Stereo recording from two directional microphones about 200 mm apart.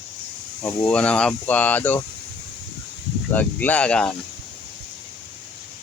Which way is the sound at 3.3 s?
10° left (ahead or behind).